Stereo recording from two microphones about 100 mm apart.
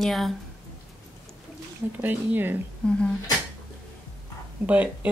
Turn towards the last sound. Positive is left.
turn(degrees=-15)  # may be behind; listen again after turning